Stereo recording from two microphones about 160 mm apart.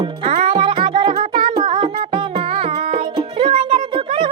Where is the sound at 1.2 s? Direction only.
55° right (ahead or behind).